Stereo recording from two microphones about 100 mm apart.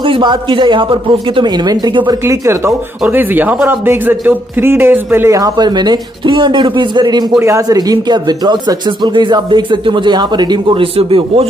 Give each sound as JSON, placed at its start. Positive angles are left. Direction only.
{"t": 0.0, "sound": "speech", "side_deg": -55}
{"t": 2.2, "sound": "speech", "side_deg": -30}
{"t": 5.3, "sound": "speech", "side_deg": -40}
{"t": 7.3, "sound": "speech", "side_deg": -30}
{"t": 7.6, "sound": "speech", "side_deg": -40}